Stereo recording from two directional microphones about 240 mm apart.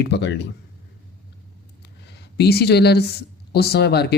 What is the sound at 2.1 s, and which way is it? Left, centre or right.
Speech, left.